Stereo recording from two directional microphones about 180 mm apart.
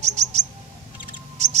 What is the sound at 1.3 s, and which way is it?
Mouse, 40° right (ahead or behind).